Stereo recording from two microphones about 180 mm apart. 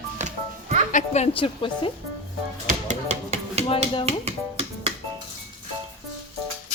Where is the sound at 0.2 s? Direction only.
40° right (ahead or behind).